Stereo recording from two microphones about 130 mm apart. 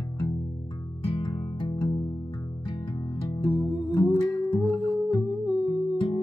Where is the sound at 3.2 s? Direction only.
35° left (ahead or behind).